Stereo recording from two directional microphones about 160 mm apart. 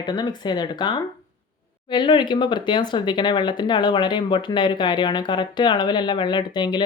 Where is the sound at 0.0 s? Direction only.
25° left (ahead or behind).